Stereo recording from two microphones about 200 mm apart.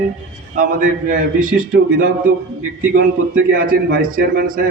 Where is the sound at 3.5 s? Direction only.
45° right (ahead or behind).